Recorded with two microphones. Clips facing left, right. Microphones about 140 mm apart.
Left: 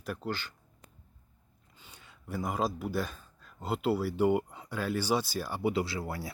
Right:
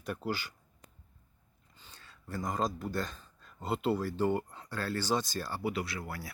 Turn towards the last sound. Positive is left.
turn(degrees=25)  # may be behind; listen again after turning